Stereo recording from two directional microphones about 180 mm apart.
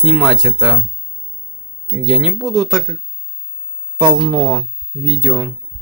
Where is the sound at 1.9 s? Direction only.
Centre (ahead or behind).